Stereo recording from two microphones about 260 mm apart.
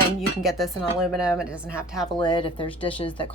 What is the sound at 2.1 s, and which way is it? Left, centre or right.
Speech, centre.